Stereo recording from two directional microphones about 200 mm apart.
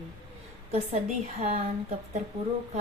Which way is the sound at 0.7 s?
35° right (ahead or behind).